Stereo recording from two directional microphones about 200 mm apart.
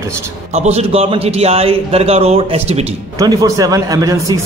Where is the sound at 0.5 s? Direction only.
30° right (ahead or behind).